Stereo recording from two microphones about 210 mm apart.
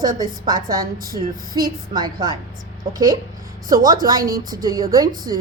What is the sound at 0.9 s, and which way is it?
A woman's voice, 45° right (ahead or behind).